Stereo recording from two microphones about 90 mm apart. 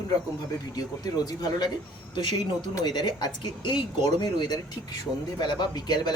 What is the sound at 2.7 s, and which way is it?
Speech, 50° left (ahead or behind).